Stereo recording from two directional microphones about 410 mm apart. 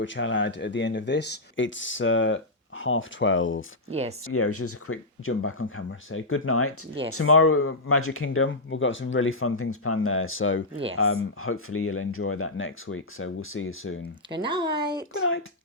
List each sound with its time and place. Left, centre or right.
0.0 s speech: left
3.8 s speech: centre
4.3 s speech: left
10.8 s speech: centre
11.0 s speech: left
14.4 s a sound: centre
15.1 s a sound: left